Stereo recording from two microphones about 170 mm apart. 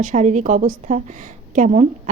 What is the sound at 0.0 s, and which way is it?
A woman's voice, 45° right (ahead or behind).